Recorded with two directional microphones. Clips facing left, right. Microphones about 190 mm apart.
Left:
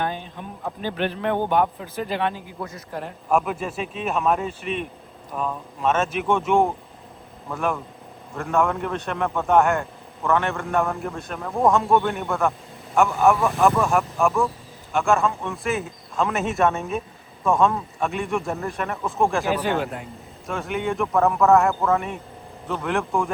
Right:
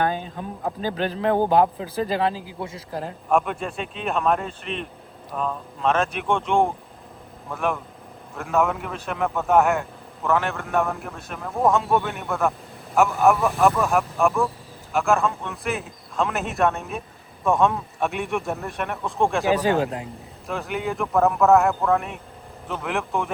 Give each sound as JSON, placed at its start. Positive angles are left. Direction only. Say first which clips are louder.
{"t": 0.3, "sound": "speech", "louder": "right 3 dB", "side_deg": -40}
{"t": 2.3, "sound": "speech", "louder": "right 2 dB", "side_deg": -90}
{"t": 2.6, "sound": "a man's voice", "louder": "right 1 dB", "side_deg": -25}
{"t": 3.3, "sound": "a man's voice", "louder": "even", "side_deg": 0}
{"t": 19.7, "sound": "speech", "louder": "right 2 dB", "side_deg": -35}
{"t": 20.5, "sound": "a man's voice", "louder": "left 1 dB", "side_deg": 0}